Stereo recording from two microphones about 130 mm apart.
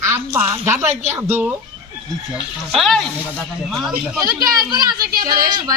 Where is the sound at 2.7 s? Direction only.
Centre (ahead or behind).